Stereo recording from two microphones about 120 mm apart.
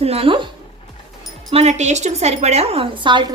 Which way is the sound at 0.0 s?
55° right (ahead or behind).